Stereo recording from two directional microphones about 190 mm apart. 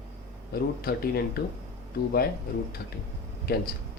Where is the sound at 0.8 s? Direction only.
55° left (ahead or behind).